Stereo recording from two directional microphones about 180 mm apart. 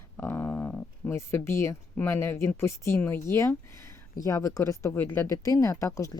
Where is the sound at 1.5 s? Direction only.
15° left (ahead or behind).